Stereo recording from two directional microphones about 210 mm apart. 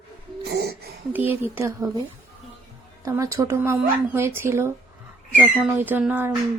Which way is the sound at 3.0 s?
15° right (ahead or behind).